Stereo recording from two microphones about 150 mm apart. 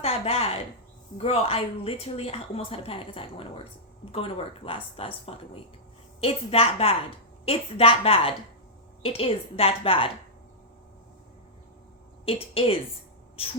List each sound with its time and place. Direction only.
0.0 s a woman's voice: 40° left (ahead or behind)
12.2 s a woman's voice: 40° left (ahead or behind)